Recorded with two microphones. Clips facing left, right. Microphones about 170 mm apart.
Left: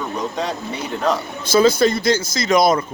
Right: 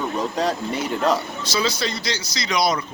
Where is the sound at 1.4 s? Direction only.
50° left (ahead or behind).